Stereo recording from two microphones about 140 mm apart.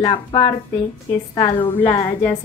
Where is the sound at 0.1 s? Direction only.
35° left (ahead or behind).